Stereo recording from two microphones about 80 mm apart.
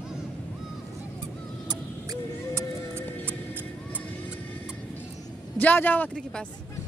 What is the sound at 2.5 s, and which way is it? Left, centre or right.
Music, right.